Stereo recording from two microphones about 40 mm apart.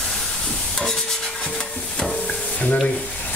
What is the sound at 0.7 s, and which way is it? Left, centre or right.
Stir, centre.